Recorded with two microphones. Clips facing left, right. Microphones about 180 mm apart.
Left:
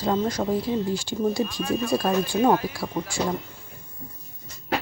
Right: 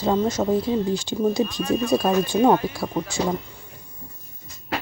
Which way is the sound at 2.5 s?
5° left (ahead or behind).